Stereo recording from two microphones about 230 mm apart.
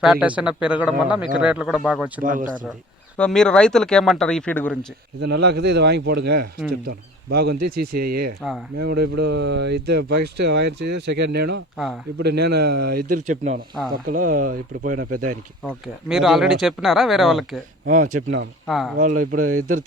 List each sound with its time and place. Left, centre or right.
0.0 s speech: centre
2.2 s speech: right
3.2 s speech: centre
5.2 s speech: right
8.4 s speech: centre
8.8 s speech: right
15.6 s speech: centre
17.8 s speech: right
18.1 s speech: right
18.7 s speech: centre
18.9 s speech: right